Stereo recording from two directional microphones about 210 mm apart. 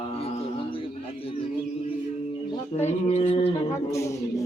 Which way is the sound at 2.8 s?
30° left (ahead or behind).